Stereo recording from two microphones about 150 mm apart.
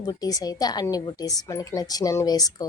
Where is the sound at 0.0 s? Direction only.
25° left (ahead or behind).